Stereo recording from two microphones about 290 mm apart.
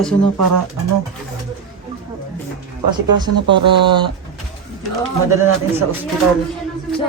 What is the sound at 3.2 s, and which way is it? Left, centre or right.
Speech, centre.